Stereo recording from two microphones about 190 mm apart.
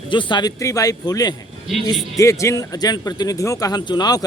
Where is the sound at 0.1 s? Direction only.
25° left (ahead or behind).